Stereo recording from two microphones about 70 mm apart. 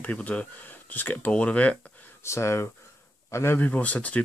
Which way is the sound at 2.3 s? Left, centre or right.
Left.